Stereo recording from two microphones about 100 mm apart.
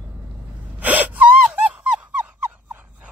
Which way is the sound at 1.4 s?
10° right (ahead or behind).